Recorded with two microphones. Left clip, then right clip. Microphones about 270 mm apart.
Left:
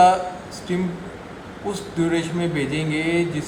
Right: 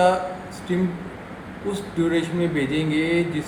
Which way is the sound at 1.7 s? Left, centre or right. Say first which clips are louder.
Even; left.